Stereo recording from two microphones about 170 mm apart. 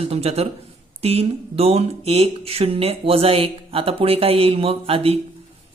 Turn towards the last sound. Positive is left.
turn(degrees=-35)  # may be behind; listen again after turning